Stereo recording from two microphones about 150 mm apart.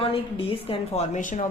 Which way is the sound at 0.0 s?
40° left (ahead or behind).